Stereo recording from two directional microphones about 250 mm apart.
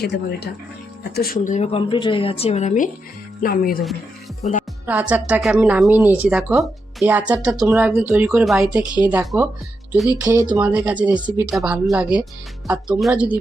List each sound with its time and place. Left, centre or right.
0.0 s a woman's voice: left
4.9 s a woman's voice: centre